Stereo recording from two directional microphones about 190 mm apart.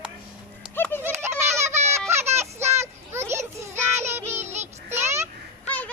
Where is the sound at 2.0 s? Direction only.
15° right (ahead or behind).